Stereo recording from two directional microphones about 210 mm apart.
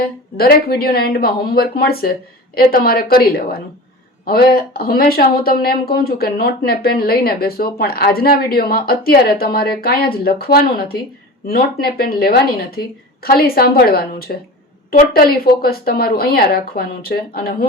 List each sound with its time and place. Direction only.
0.0 s speech: 45° left (ahead or behind)